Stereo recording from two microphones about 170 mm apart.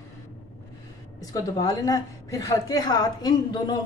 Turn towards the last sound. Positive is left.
turn(degrees=25)  # may be behind; listen again after turning